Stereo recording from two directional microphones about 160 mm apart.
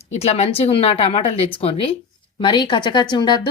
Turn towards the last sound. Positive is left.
turn(degrees=30)  # may be behind; listen again after turning